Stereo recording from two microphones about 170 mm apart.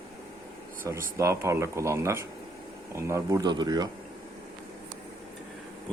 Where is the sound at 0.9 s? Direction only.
15° right (ahead or behind).